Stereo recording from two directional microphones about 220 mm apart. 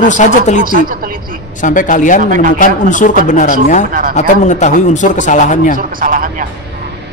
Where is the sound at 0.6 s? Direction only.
40° right (ahead or behind).